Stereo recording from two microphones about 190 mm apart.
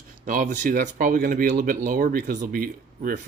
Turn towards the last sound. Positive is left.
turn(degrees=-50)  # may be behind; listen again after turning